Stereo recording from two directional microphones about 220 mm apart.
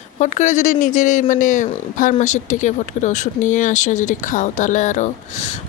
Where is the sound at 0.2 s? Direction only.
35° left (ahead or behind).